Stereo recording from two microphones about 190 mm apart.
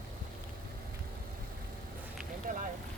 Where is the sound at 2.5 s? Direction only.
45° right (ahead or behind).